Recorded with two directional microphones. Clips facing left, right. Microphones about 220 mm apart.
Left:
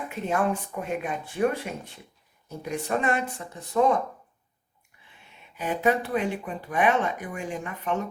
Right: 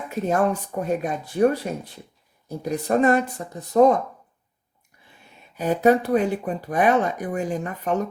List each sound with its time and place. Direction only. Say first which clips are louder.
0.1 s speech: right 5 dB; 40° right (ahead or behind)
5.5 s speech: right 6 dB; 40° right (ahead or behind)